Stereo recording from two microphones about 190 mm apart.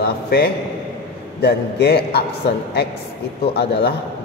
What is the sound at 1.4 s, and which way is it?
Speech, 60° left (ahead or behind).